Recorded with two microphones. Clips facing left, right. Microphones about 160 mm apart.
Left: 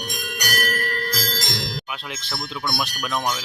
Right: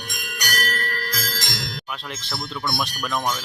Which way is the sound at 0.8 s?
30° left (ahead or behind).